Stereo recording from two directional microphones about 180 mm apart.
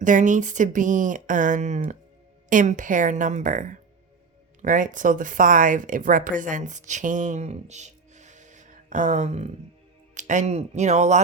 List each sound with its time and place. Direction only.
0.0 s speech: 45° right (ahead or behind)